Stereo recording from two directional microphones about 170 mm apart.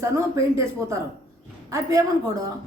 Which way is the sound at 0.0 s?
20° right (ahead or behind).